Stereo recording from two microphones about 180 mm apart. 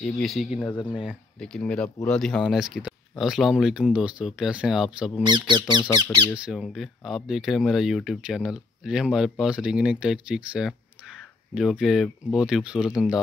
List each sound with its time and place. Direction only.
0.0 s speech: centre (ahead or behind)
0.7 s speech: 25° left (ahead or behind)
1.0 s speech: 5° left (ahead or behind)
5.3 s speech: 25° right (ahead or behind)
6.3 s speech: 5° right (ahead or behind)